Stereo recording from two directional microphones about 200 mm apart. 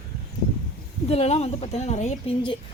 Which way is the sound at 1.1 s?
30° left (ahead or behind).